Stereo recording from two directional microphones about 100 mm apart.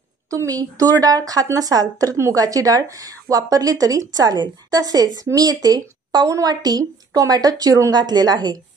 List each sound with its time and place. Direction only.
0.3 s a woman's voice: 35° right (ahead or behind)